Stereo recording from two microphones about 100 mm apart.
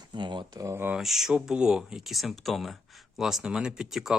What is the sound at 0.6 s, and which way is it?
Speech, 25° right (ahead or behind).